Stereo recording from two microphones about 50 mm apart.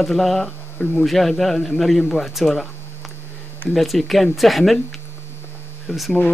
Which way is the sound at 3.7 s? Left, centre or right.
Centre.